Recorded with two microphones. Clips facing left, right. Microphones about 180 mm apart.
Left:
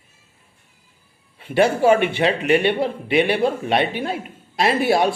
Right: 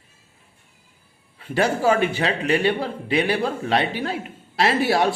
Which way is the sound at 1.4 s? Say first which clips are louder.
Left 4 dB; 25° left (ahead or behind).